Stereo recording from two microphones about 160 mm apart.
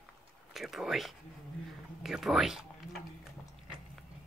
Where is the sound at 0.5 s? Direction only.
Centre (ahead or behind).